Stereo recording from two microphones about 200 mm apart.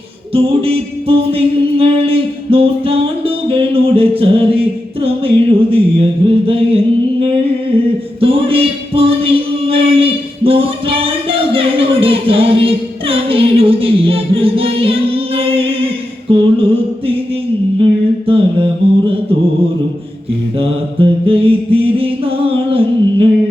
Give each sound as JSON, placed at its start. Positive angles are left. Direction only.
{"t": 0.3, "sound": "music", "side_deg": -30}
{"t": 5.7, "sound": "music", "side_deg": -30}
{"t": 18.3, "sound": "mantra", "side_deg": -30}
{"t": 20.6, "sound": "music", "side_deg": -30}